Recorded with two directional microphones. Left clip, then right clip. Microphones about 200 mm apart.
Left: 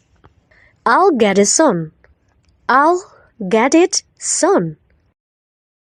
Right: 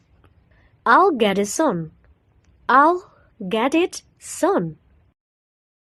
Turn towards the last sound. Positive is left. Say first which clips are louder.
# left 6 dB
turn(degrees=35)  # may be behind; listen again after turning